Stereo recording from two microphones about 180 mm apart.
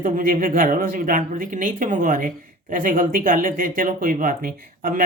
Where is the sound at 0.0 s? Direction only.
45° right (ahead or behind).